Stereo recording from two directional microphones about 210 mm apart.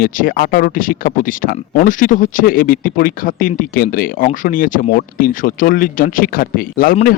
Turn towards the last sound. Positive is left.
turn(degrees=45)  # may be behind; listen again after turning